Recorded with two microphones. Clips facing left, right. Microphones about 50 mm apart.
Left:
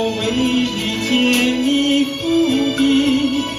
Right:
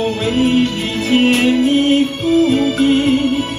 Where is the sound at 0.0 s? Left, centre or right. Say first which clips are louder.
Right 2 dB; centre.